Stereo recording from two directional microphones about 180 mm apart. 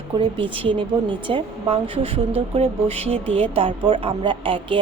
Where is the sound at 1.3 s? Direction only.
30° right (ahead or behind).